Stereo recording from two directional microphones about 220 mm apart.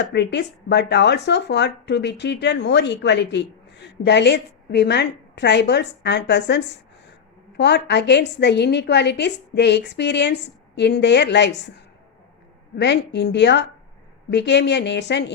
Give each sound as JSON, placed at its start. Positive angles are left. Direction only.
{"t": 0.0, "sound": "speech", "side_deg": 50}
{"t": 12.7, "sound": "speech", "side_deg": 50}